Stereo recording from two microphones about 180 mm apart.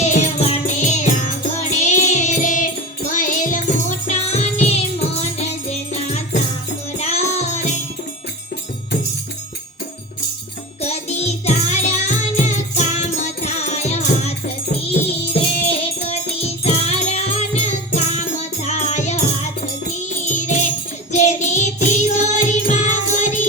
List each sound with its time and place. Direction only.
0.0 s music: 40° left (ahead or behind)
10.8 s music: 35° left (ahead or behind)